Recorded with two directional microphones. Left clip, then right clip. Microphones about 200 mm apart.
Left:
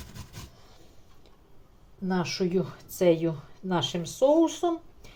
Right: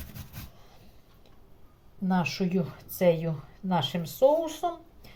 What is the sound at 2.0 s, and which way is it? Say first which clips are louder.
Speech: left 1 dB; 15° left (ahead or behind).